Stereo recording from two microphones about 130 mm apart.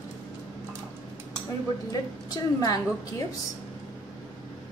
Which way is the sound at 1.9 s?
30° left (ahead or behind).